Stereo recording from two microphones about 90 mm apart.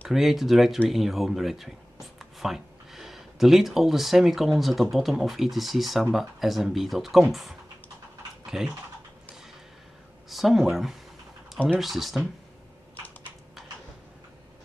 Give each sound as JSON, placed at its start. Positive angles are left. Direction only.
{"t": 0.1, "sound": "speech", "side_deg": 0}
{"t": 10.3, "sound": "speech", "side_deg": 0}
{"t": 13.6, "sound": "a sound", "side_deg": 0}